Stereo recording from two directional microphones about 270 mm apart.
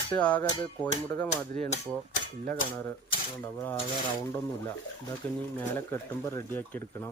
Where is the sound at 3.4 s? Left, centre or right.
Centre.